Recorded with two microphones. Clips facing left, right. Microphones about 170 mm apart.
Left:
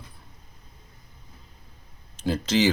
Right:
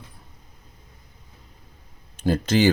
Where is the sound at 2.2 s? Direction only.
55° right (ahead or behind).